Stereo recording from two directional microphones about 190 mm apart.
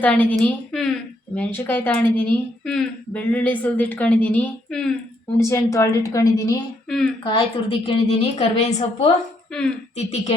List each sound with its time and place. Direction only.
0.0 s a woman's voice: 10° left (ahead or behind)
5.4 s a woman's voice: 15° left (ahead or behind)
6.9 s a woman's voice: centre (ahead or behind)
7.3 s a woman's voice: 25° left (ahead or behind)